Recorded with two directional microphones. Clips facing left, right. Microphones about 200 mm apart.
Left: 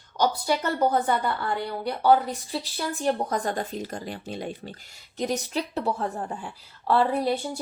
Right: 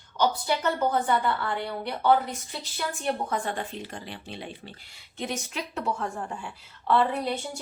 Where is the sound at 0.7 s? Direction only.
40° left (ahead or behind).